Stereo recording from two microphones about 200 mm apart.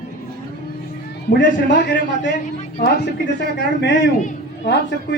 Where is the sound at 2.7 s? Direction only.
55° left (ahead or behind).